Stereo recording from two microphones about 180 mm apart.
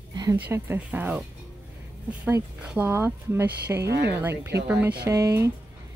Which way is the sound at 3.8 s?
65° right (ahead or behind).